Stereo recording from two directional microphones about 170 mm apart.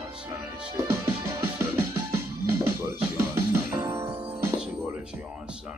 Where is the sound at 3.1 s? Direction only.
15° right (ahead or behind).